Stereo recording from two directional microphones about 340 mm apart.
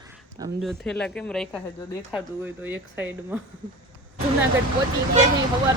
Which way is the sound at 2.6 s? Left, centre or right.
Centre.